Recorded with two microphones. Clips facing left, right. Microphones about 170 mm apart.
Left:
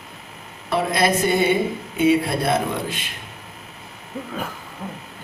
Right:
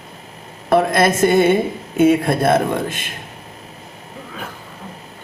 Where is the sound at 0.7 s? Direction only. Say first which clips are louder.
Right 5 dB; 50° right (ahead or behind).